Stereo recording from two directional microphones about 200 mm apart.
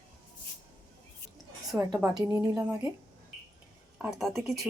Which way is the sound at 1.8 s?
15° right (ahead or behind).